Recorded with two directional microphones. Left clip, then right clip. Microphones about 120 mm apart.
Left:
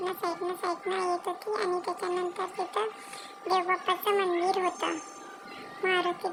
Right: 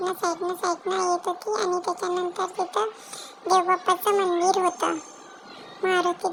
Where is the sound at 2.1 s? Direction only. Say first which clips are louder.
Right 5 dB; 5° right (ahead or behind).